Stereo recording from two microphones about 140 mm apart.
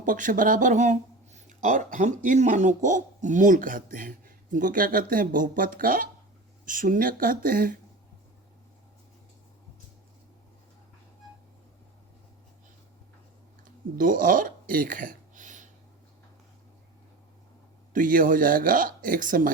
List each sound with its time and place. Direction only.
0.0 s speech: 70° right (ahead or behind); by 6.1 s 90° right
6.7 s speech: 75° right (ahead or behind)
14.0 s speech: 75° right (ahead or behind)
17.9 s speech: 75° right (ahead or behind)